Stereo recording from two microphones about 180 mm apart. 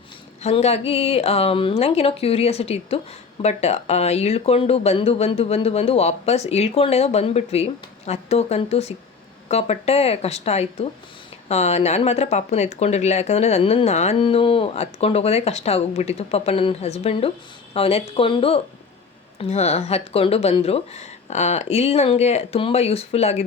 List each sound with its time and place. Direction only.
0.4 s speech: 35° left (ahead or behind)